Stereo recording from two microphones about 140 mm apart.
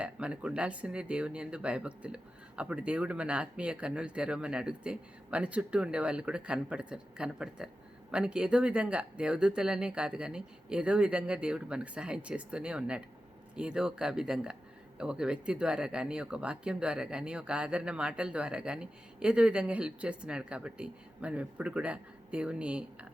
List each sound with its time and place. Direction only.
0.0 s speech: 5° right (ahead or behind)